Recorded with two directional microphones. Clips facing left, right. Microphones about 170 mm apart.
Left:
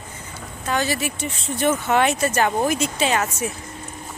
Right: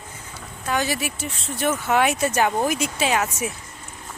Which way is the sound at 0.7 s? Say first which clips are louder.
Left 1 dB; 10° right (ahead or behind).